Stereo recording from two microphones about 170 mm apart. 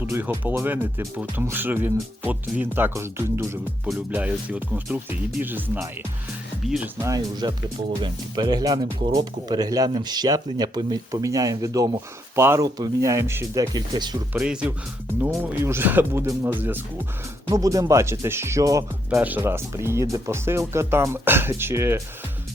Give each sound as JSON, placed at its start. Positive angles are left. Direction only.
{"t": 0.0, "sound": "speech", "side_deg": -10}
{"t": 7.0, "sound": "speech", "side_deg": -20}
{"t": 14.3, "sound": "speech", "side_deg": -5}